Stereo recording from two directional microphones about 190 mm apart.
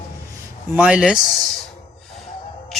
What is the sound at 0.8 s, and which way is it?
Speech, 5° right (ahead or behind).